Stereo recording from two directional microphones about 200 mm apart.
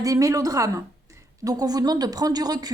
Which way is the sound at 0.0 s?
15° right (ahead or behind).